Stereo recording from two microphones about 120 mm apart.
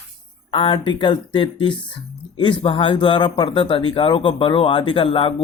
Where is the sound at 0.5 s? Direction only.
45° left (ahead or behind).